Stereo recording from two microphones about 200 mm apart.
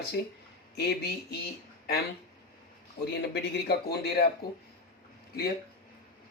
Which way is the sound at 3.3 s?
50° left (ahead or behind).